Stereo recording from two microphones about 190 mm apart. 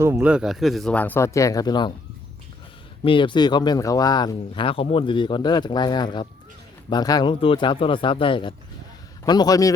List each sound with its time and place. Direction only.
0.0 s speech: 10° right (ahead or behind); by 1.9 s 20° left (ahead or behind)
3.0 s speech: 25° left (ahead or behind)